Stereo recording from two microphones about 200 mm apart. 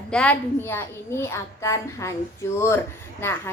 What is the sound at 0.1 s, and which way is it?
A child's voice, 5° left (ahead or behind).